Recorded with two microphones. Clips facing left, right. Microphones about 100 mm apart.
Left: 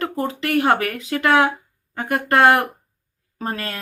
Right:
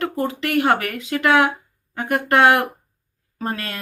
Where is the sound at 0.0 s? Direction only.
35° left (ahead or behind).